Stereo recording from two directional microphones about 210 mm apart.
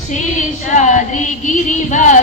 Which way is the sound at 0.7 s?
35° left (ahead or behind).